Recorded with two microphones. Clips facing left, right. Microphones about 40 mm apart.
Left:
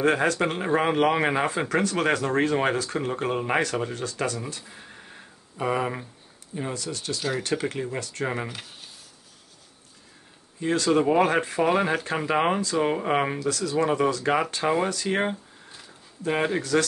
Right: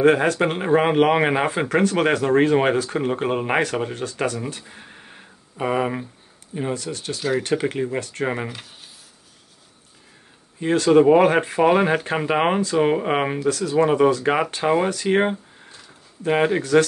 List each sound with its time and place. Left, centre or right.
0.0 s speech: centre
6.5 s speech: right
7.2 s speech: centre
8.0 s speech: right
10.6 s speech: right